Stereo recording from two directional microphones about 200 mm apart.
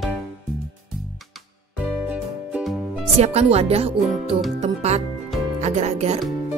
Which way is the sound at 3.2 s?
30° right (ahead or behind).